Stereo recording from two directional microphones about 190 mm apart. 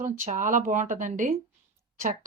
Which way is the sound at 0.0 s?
40° right (ahead or behind).